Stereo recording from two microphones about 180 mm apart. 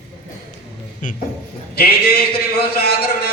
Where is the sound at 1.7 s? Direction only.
60° left (ahead or behind).